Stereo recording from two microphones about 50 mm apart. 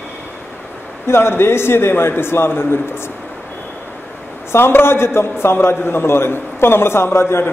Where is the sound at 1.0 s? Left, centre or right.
Left.